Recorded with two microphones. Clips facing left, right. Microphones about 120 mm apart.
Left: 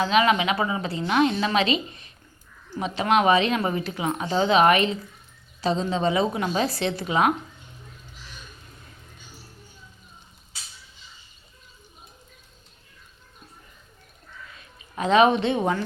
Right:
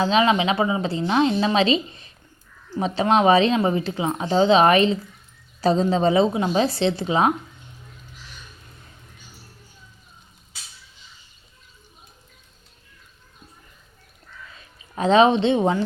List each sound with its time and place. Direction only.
0.0 s a woman's voice: 30° right (ahead or behind)
6.3 s a woman's voice: 25° right (ahead or behind)
14.9 s a woman's voice: 30° right (ahead or behind)